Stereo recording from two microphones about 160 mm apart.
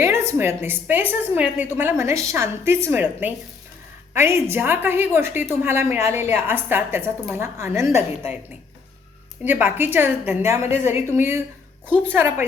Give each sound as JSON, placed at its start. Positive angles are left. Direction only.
{"t": 0.0, "sound": "a woman's voice", "side_deg": -15}
{"t": 9.4, "sound": "a woman's voice", "side_deg": -10}